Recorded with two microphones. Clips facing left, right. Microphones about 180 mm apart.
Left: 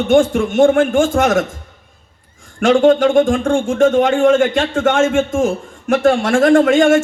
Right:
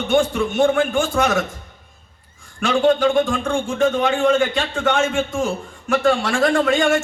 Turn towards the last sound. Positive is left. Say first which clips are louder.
# left 7 dB
turn(degrees=45)  # may be behind; listen again after turning